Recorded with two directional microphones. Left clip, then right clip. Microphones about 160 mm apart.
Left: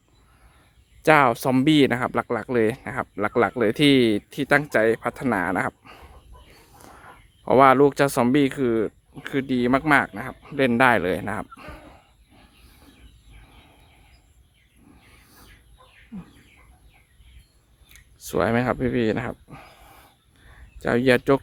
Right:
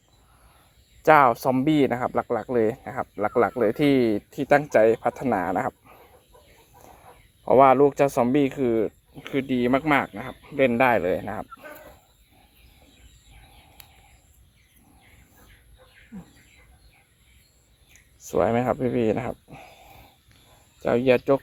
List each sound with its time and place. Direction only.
1.0 s speech: 40° left (ahead or behind)
4.3 s speech: 15° left (ahead or behind)
7.4 s speech: 25° left (ahead or behind)
10.4 s speech: 25° left (ahead or behind)
18.3 s speech: 15° left (ahead or behind)
20.8 s speech: 25° left (ahead or behind)